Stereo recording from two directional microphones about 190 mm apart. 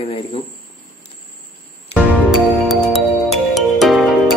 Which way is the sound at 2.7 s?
Centre (ahead or behind).